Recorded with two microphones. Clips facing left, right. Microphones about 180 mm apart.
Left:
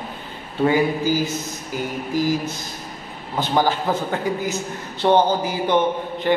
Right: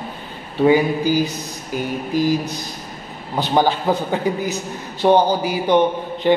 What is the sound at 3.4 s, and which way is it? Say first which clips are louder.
A man's voice: right 2 dB; 15° right (ahead or behind).